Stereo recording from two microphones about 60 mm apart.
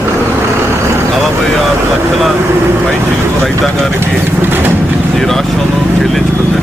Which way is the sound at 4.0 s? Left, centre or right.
Right.